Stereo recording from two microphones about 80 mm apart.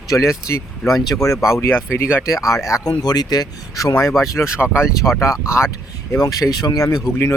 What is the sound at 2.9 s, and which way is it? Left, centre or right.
Speech, left.